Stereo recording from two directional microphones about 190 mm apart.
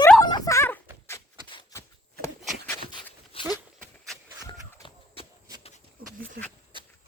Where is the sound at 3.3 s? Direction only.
25° left (ahead or behind).